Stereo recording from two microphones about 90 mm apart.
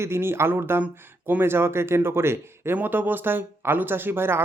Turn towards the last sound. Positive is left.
turn(degrees=-25)  # may be behind; listen again after turning